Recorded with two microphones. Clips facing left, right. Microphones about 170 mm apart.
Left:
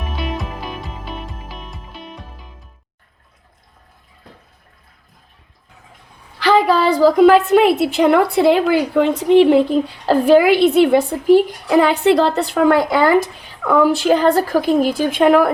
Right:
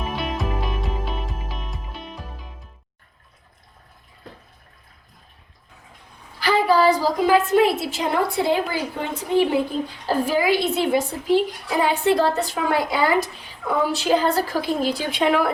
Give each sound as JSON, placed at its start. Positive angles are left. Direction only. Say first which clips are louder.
{"t": 0.2, "sound": "music", "louder": "left 3 dB", "side_deg": 0}
{"t": 6.4, "sound": "a woman's voice", "louder": "left 3 dB", "side_deg": 90}
{"t": 11.8, "sound": "a woman's voice", "louder": "left 5 dB", "side_deg": 75}